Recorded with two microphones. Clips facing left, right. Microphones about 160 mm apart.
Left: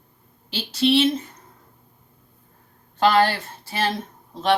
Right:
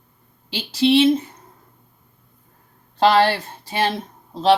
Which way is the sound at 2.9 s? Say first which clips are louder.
Right 2 dB; 35° right (ahead or behind).